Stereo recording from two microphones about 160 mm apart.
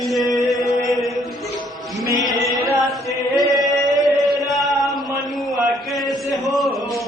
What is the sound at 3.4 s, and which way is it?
Chant, 25° right (ahead or behind).